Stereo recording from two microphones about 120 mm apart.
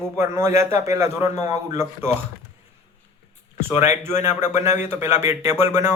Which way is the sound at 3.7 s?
70° left (ahead or behind).